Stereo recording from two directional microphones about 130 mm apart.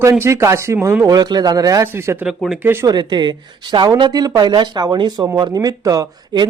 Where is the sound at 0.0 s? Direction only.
20° right (ahead or behind).